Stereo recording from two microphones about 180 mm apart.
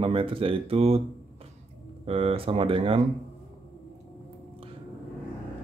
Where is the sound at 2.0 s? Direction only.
30° right (ahead or behind).